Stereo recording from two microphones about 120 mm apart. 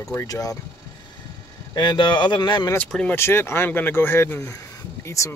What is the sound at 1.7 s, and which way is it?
Speech, 40° left (ahead or behind).